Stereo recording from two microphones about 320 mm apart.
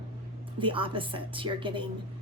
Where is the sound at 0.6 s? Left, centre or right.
Centre.